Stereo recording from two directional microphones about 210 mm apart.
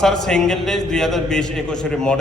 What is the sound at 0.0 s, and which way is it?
A man's voice, centre (ahead or behind).